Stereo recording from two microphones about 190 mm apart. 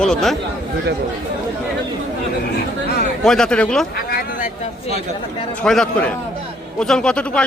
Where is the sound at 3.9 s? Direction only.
45° left (ahead or behind).